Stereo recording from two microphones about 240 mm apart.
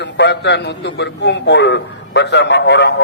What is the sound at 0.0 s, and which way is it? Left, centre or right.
A man's voice, left.